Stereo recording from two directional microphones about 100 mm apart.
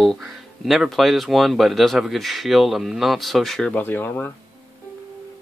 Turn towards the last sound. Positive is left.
turn(degrees=20)  # may be behind; listen again after turning